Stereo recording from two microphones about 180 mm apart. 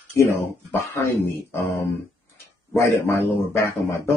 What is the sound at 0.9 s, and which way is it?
Speech, 15° left (ahead or behind).